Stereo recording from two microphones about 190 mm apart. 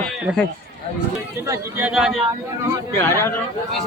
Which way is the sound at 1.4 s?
10° right (ahead or behind).